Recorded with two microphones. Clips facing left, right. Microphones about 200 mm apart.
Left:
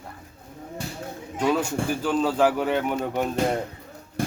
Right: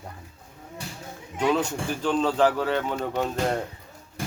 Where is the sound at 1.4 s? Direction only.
10° left (ahead or behind).